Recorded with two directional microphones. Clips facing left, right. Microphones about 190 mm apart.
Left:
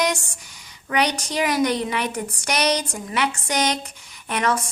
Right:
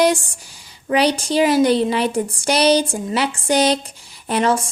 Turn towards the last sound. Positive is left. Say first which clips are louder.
# right 5 dB
turn(degrees=-30)  # may be behind; listen again after turning